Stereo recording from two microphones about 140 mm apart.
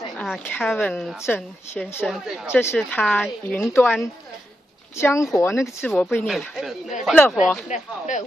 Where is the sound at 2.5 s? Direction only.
15° left (ahead or behind).